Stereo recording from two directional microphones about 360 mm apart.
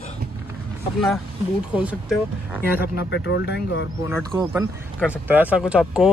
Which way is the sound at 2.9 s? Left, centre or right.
Left.